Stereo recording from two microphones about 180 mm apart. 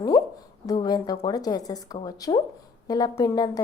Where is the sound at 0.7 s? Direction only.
20° left (ahead or behind).